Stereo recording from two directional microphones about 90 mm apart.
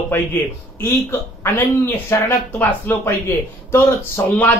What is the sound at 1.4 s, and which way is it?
Speech, 30° left (ahead or behind).